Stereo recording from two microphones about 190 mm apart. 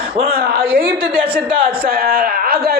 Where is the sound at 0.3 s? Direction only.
55° right (ahead or behind).